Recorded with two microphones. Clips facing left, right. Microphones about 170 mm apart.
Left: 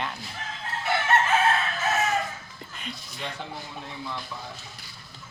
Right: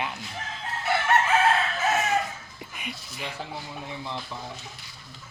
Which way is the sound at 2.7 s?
10° right (ahead or behind).